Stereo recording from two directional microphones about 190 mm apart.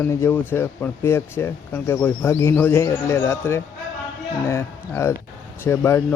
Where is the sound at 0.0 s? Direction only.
10° left (ahead or behind).